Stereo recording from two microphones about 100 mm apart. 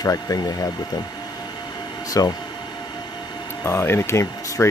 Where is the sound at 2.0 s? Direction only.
35° left (ahead or behind).